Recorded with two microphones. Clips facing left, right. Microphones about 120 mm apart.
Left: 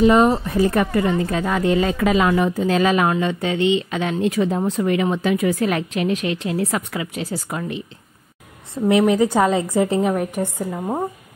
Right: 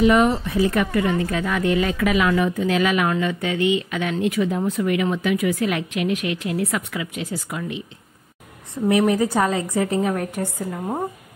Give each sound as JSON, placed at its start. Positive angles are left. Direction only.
{"t": 0.0, "sound": "speech", "side_deg": 30}
{"t": 0.4, "sound": "speech", "side_deg": 40}
{"t": 8.7, "sound": "a woman's voice", "side_deg": 25}
{"t": 10.3, "sound": "a woman's voice", "side_deg": 15}